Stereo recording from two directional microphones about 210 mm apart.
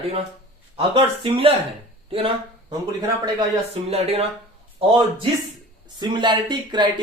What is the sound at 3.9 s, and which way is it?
Speech, 30° right (ahead or behind).